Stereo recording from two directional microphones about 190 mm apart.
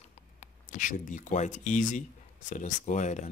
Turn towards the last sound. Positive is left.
turn(degrees=40)  # may be behind; listen again after turning